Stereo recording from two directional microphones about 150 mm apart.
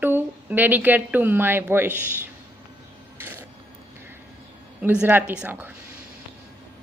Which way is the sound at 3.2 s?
15° right (ahead or behind).